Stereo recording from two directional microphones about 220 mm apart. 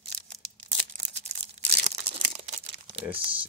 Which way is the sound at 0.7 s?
30° right (ahead or behind).